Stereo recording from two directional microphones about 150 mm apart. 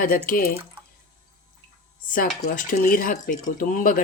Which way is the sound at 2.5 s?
65° left (ahead or behind).